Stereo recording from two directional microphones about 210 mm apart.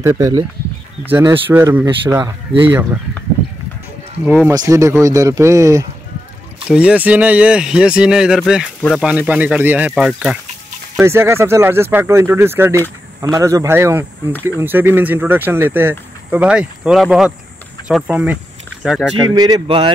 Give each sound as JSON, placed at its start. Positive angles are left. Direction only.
{"t": 0.0, "sound": "speech", "side_deg": -15}
{"t": 4.5, "sound": "speech", "side_deg": -15}
{"t": 19.2, "sound": "a man's voice", "side_deg": -20}